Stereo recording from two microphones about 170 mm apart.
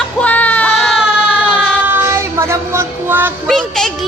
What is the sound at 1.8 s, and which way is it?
Child singing, 15° right (ahead or behind).